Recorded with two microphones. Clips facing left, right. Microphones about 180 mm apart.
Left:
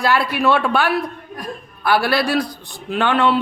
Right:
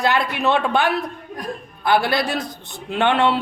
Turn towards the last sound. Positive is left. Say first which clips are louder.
# left 1 dB
turn(degrees=-20)  # may be behind; listen again after turning